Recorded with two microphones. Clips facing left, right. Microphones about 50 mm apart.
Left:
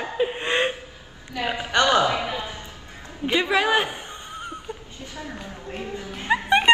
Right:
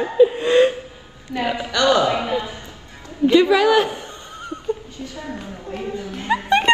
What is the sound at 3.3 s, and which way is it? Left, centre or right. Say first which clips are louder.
A woman's voice: right 7 dB; left.